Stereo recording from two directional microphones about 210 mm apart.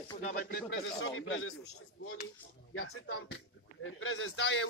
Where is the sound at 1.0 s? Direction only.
70° left (ahead or behind).